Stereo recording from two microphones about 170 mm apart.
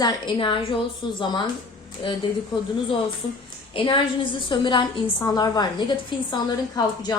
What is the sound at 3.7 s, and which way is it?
A woman's voice, 30° left (ahead or behind).